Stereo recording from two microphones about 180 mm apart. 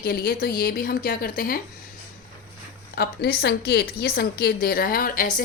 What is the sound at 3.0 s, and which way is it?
A woman's voice, 65° left (ahead or behind).